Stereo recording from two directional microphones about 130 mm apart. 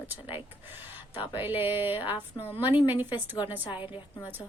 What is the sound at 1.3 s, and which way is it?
Speech, 15° right (ahead or behind).